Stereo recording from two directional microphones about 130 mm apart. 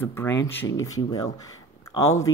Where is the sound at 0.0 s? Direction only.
20° left (ahead or behind).